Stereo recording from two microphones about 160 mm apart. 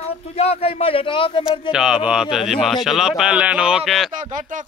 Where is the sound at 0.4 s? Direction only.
40° left (ahead or behind).